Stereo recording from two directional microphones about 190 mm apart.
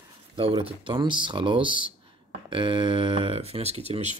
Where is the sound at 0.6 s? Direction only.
25° right (ahead or behind).